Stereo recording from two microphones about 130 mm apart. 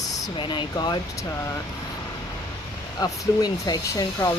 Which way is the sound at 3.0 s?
30° left (ahead or behind).